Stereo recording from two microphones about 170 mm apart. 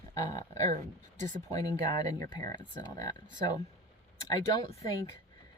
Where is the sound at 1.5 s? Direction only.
20° left (ahead or behind).